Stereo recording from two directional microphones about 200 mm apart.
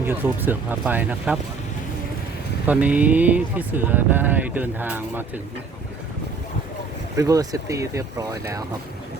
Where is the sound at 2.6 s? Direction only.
5° right (ahead or behind).